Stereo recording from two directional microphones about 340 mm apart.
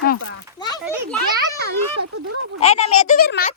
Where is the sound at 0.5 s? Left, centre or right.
Centre.